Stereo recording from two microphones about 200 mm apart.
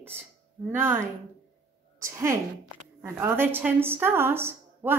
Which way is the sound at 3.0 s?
10° right (ahead or behind).